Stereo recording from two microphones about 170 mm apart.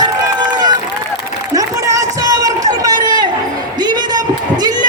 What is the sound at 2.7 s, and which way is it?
Run, 20° right (ahead or behind).